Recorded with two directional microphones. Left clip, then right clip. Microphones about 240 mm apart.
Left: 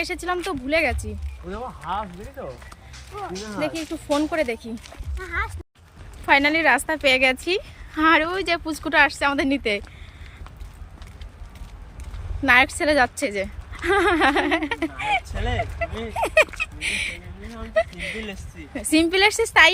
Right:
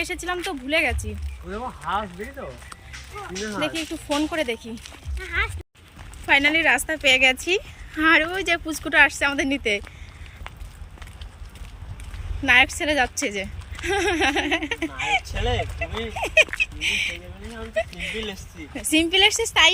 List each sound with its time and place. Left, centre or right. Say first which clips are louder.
0.0 s speech: left 1 dB; centre
1.5 s speech: right 1 dB; left
3.1 s speech: even; centre
12.5 s speech: left 1 dB; centre
16.1 s speech: even; centre